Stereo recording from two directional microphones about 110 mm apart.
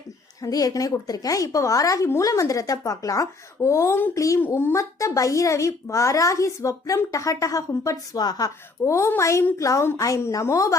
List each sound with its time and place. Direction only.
0.4 s a child's voice: 35° left (ahead or behind)
4.4 s a child's voice: 20° left (ahead or behind); by 8.5 s 35° left (ahead or behind)
8.8 s a child's voice: 25° left (ahead or behind)